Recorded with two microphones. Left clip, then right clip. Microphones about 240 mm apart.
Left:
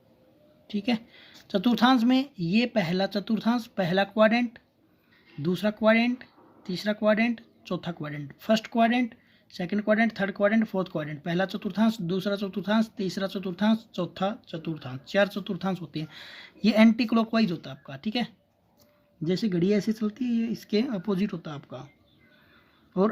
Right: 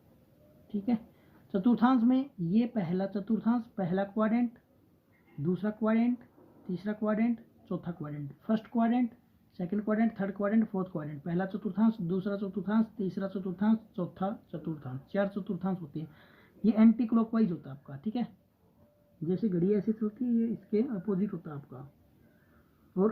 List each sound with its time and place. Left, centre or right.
0.7 s speech: left
19.3 s speech: left